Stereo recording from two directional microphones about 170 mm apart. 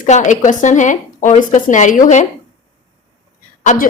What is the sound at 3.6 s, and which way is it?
Speech, 50° left (ahead or behind).